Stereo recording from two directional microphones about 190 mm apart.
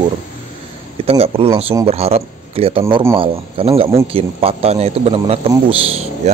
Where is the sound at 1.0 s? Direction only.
30° right (ahead or behind).